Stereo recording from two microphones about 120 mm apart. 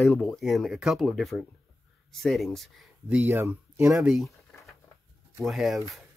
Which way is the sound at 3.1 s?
15° right (ahead or behind).